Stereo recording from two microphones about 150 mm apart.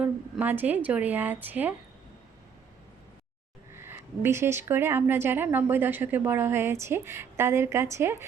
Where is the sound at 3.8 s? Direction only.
15° right (ahead or behind).